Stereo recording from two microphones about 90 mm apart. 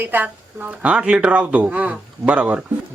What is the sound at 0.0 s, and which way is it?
Speech, 20° right (ahead or behind).